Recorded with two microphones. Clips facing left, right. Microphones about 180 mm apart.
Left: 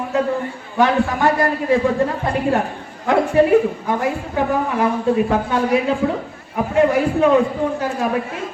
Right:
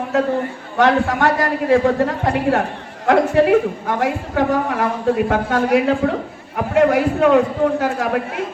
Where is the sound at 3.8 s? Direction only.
75° right (ahead or behind).